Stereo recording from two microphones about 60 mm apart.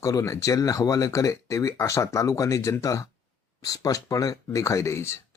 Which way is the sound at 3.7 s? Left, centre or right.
Left.